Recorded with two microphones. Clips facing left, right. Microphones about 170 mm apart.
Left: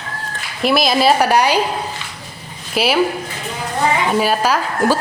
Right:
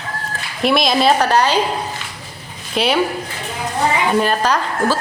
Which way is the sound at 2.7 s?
5° left (ahead or behind).